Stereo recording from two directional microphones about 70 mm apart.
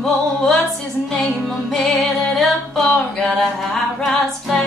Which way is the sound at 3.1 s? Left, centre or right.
Centre.